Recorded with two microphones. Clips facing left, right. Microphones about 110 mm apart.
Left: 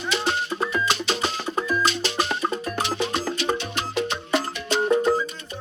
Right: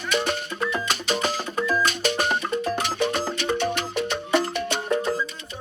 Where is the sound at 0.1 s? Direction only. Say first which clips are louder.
Even; 55° right (ahead or behind).